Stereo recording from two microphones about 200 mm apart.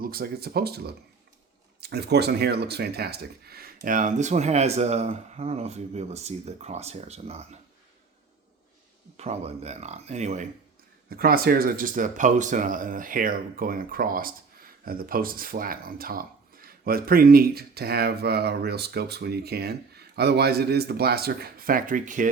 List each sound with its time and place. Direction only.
0.0 s speech: 50° right (ahead or behind); by 7.4 s 30° right (ahead or behind)
9.1 s speech: 35° right (ahead or behind)
11.1 s speech: 50° right (ahead or behind)